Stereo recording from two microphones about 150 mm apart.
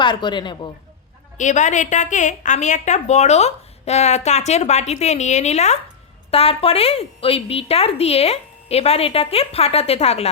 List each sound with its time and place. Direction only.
0.0 s speech: 30° left (ahead or behind)
1.4 s a woman's voice: 55° left (ahead or behind)